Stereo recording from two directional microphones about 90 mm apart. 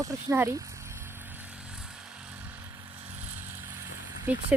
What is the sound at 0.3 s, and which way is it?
Speech, 30° right (ahead or behind).